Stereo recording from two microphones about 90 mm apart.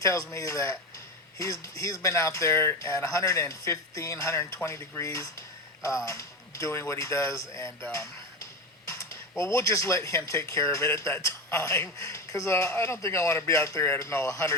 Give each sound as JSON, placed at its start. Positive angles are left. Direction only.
{"t": 0.0, "sound": "speech", "side_deg": 35}
{"t": 9.3, "sound": "speech", "side_deg": 30}